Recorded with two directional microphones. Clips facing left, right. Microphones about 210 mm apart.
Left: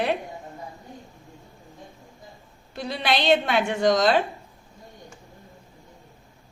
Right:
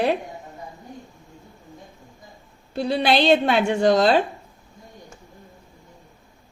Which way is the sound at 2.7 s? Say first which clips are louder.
Right 6 dB; 30° right (ahead or behind).